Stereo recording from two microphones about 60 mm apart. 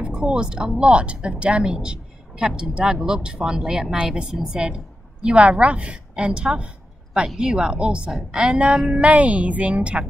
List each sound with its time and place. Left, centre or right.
0.0 s a woman's voice: centre